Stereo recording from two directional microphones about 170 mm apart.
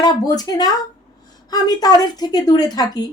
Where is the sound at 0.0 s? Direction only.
25° left (ahead or behind).